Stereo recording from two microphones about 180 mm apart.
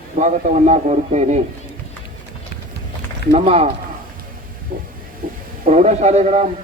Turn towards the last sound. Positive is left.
turn(degrees=-40)  # may be behind; listen again after turning